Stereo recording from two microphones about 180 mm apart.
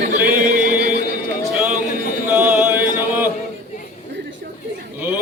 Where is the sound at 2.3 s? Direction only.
10° right (ahead or behind).